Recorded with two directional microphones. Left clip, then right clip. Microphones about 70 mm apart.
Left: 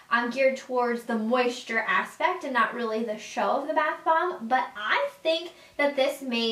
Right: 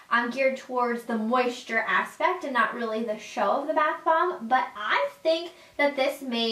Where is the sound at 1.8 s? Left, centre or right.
Centre.